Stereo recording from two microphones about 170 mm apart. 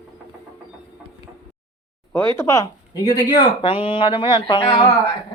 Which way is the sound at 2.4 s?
15° left (ahead or behind).